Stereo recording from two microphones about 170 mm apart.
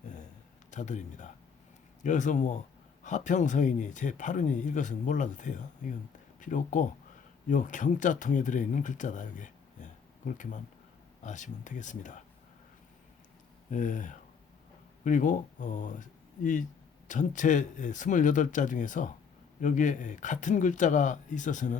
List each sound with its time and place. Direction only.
0.7 s speech: 45° left (ahead or behind)
13.7 s speech: 50° left (ahead or behind)